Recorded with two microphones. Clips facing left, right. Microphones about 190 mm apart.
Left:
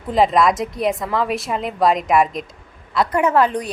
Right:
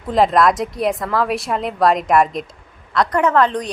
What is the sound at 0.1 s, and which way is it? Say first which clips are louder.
A woman's voice: right 1 dB; centre (ahead or behind).